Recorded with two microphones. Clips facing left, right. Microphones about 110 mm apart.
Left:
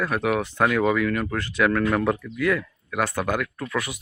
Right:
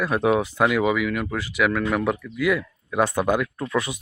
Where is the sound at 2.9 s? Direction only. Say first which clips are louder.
Right 4 dB; 20° right (ahead or behind).